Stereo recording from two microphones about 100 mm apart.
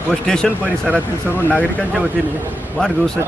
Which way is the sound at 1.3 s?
15° left (ahead or behind).